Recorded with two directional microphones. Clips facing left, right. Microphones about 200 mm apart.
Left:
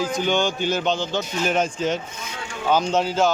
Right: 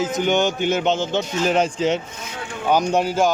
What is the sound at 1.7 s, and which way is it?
Speech, 85° right.